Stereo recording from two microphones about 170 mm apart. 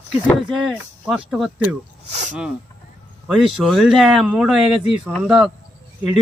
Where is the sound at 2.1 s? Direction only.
45° right (ahead or behind).